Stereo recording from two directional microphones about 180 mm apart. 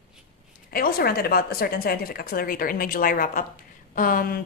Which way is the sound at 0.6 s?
55° left (ahead or behind).